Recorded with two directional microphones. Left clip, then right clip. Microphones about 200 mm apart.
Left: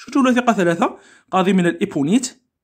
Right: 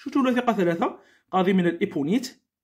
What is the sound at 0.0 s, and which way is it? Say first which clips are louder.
Speech: left 6 dB; 25° left (ahead or behind).